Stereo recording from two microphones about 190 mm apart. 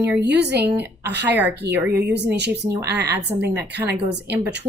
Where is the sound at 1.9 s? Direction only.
60° right (ahead or behind).